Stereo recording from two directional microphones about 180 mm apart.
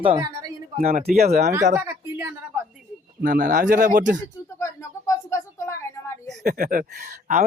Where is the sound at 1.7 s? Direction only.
10° right (ahead or behind).